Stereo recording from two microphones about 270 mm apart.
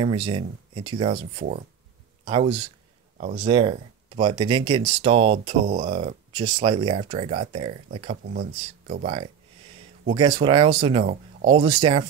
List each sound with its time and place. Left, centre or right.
0.0 s speech: centre
2.2 s speech: centre